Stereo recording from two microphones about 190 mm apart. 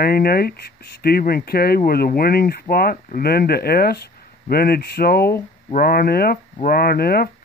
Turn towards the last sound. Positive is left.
turn(degrees=55)  # may be behind; listen again after turning